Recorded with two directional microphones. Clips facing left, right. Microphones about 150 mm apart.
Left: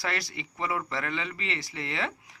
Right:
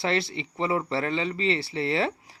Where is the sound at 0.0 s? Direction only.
25° right (ahead or behind).